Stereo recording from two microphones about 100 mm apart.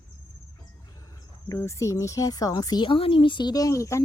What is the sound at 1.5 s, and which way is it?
Speech, 30° left (ahead or behind).